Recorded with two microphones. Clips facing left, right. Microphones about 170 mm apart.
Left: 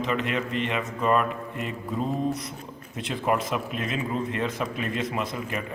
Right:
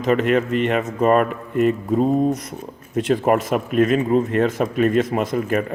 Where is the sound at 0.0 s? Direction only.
45° right (ahead or behind).